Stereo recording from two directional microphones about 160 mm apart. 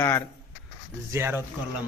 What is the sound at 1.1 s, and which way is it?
Speech, 15° right (ahead or behind).